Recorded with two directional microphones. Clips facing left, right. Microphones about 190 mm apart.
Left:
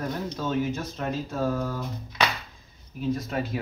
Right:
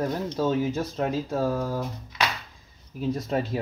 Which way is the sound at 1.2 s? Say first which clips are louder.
Right 2 dB; 35° right (ahead or behind).